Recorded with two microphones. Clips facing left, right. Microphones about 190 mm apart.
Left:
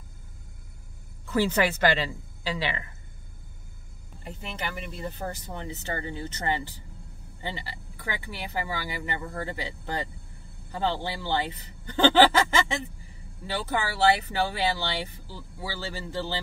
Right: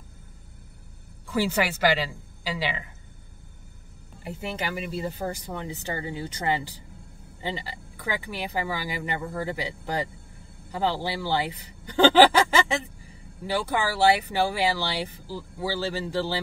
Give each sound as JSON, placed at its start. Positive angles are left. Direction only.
{"t": 1.2, "sound": "speech", "side_deg": -10}
{"t": 4.2, "sound": "speech", "side_deg": -10}
{"t": 13.5, "sound": "speech", "side_deg": -15}